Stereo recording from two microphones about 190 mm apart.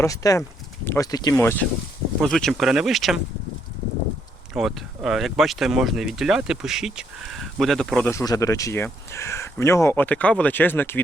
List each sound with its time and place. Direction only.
0.0 s speech: 15° left (ahead or behind)
2.2 s speech: centre (ahead or behind)
4.5 s speech: centre (ahead or behind)
8.1 s speech: 15° left (ahead or behind)